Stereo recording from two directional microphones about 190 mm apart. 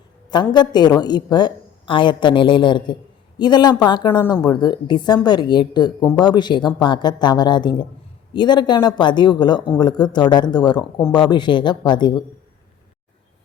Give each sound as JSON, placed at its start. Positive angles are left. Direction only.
{"t": 0.3, "sound": "a woman's voice", "side_deg": 25}